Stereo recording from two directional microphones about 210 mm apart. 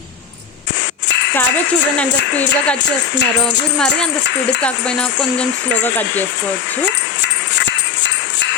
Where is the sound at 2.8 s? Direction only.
55° left (ahead or behind).